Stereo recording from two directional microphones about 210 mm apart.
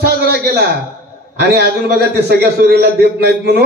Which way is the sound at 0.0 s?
50° right (ahead or behind).